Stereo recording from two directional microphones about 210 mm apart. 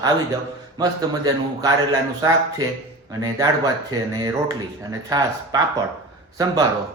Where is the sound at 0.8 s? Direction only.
15° right (ahead or behind).